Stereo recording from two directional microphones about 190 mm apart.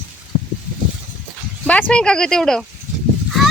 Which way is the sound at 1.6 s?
5° left (ahead or behind).